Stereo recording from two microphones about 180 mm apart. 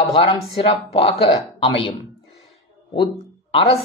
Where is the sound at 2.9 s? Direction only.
30° left (ahead or behind).